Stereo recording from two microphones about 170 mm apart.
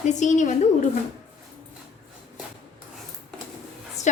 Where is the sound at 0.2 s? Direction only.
45° left (ahead or behind).